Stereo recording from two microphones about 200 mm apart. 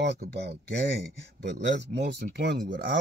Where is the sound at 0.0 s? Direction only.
60° right (ahead or behind).